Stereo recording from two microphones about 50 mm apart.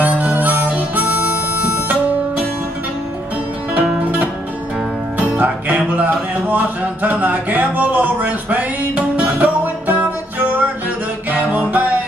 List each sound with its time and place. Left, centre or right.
0.0 s harmonica: right
4.0 s music: right